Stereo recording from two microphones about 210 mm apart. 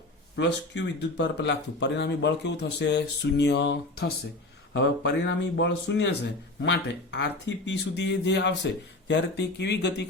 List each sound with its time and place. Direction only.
0.3 s speech: 55° left (ahead or behind)